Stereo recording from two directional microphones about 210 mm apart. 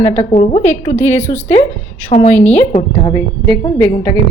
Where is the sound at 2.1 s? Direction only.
30° left (ahead or behind).